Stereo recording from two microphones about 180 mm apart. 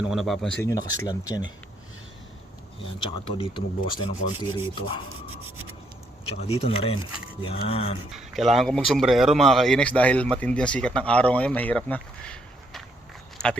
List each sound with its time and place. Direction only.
0.1 s speech: centre (ahead or behind)
0.6 s speech: 20° left (ahead or behind)
3.1 s speech: 30° left (ahead or behind)
6.2 s speech: 35° left (ahead or behind)
8.1 s speech: centre (ahead or behind)